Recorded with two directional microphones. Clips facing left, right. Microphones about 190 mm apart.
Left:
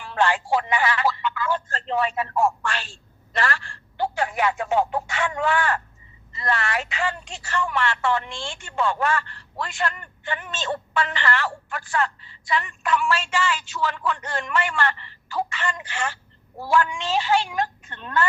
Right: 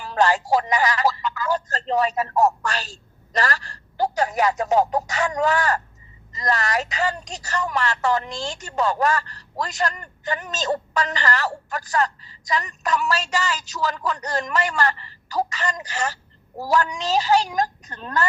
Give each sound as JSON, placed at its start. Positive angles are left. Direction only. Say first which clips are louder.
{"t": 0.0, "sound": "speech", "louder": "right 3 dB", "side_deg": -40}